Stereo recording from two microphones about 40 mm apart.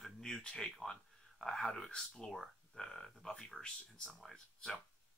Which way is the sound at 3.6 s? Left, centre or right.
Left.